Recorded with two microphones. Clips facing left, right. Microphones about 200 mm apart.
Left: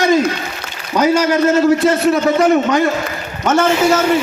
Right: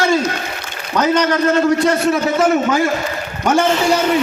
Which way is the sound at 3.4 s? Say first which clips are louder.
Left 2 dB; 10° right (ahead or behind).